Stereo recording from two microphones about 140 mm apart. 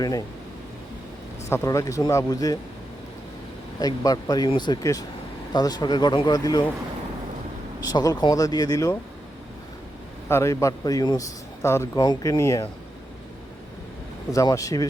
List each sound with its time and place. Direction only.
0.0 s speech: 25° left (ahead or behind)
1.5 s speech: 20° left (ahead or behind)
3.8 s speech: 25° left (ahead or behind)
7.9 s speech: 25° left (ahead or behind)
10.2 s speech: 20° left (ahead or behind)
14.3 s speech: 25° left (ahead or behind)